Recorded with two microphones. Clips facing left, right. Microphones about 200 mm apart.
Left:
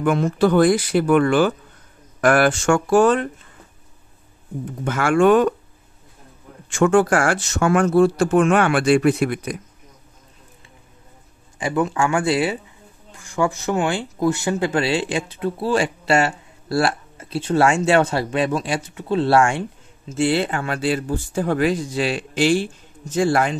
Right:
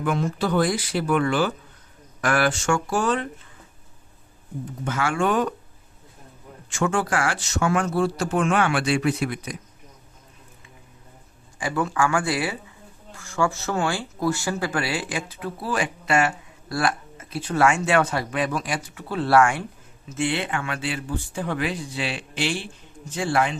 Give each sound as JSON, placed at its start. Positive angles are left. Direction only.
{"t": 0.0, "sound": "speech", "side_deg": 55}
{"t": 4.8, "sound": "speech", "side_deg": 55}
{"t": 6.7, "sound": "speech", "side_deg": 55}
{"t": 11.6, "sound": "speech", "side_deg": 20}